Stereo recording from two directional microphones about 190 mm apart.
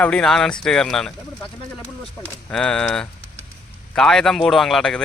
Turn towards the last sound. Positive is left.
turn(degrees=5)  # may be behind; listen again after turning